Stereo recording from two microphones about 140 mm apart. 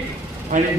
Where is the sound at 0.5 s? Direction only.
70° right (ahead or behind).